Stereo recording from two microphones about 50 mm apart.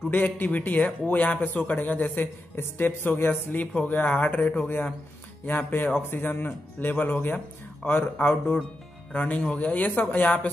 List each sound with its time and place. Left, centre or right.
0.1 s speech: left
9.1 s speech: left